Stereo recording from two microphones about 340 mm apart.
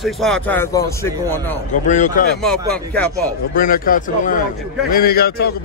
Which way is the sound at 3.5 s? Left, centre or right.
Left.